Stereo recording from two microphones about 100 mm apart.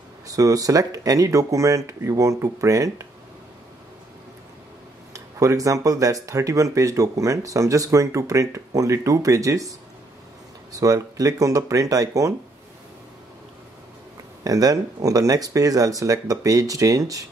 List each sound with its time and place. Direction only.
0.3 s speech: 35° right (ahead or behind)
5.1 s speech: 35° right (ahead or behind)
14.4 s speech: 40° right (ahead or behind)